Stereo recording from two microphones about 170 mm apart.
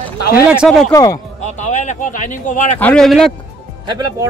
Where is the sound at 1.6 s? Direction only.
45° left (ahead or behind).